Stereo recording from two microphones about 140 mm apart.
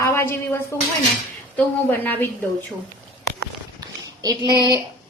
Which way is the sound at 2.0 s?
15° left (ahead or behind).